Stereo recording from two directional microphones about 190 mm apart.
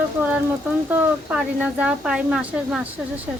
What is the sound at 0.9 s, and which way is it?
Speech, 5° right (ahead or behind).